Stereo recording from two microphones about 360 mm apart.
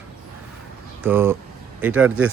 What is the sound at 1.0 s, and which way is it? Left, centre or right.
Speech, centre.